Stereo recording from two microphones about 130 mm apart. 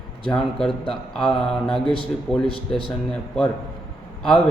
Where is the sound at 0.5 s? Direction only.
5° left (ahead or behind).